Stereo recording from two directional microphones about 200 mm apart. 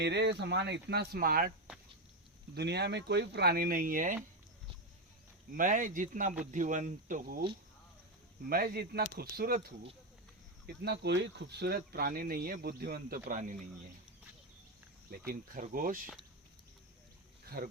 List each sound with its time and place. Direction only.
0.0 s speech: 60° right (ahead or behind)
2.6 s speech: 55° right (ahead or behind)
5.5 s speech: 40° right (ahead or behind)
8.4 s speech: 45° right (ahead or behind)
10.8 s speech: 55° right (ahead or behind); by 13.6 s 40° right (ahead or behind)
15.3 s speech: 45° right (ahead or behind)
17.4 s a sound: 50° right (ahead or behind)